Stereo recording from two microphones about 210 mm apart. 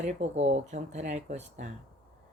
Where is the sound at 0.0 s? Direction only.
35° right (ahead or behind).